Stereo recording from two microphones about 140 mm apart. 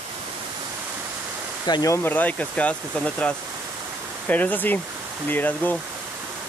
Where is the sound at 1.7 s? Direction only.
30° left (ahead or behind).